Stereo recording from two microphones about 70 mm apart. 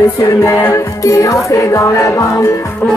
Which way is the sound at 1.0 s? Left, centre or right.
Left.